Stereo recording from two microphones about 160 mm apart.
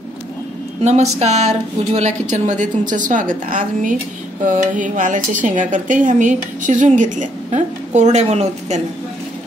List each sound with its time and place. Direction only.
0.8 s speech: 45° right (ahead or behind)